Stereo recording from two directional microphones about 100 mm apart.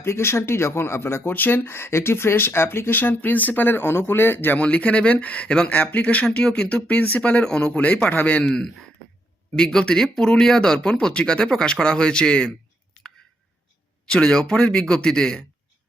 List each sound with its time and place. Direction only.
0.0 s speech: 25° left (ahead or behind); by 12.5 s 10° left (ahead or behind)
14.1 s speech: 5° left (ahead or behind)